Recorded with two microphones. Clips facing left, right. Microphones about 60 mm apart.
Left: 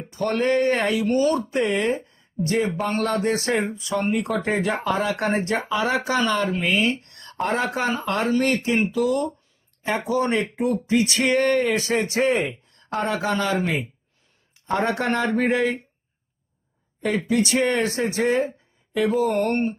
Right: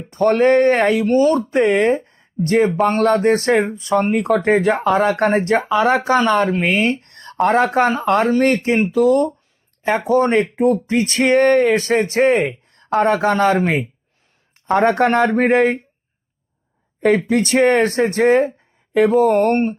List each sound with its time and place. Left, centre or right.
0.1 s speech: right
17.2 s speech: right